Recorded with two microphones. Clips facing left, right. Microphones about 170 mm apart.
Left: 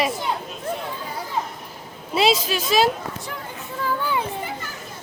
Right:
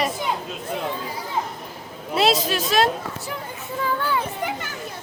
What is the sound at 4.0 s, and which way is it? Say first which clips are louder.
Children playing: left 1 dB; 20° left (ahead or behind).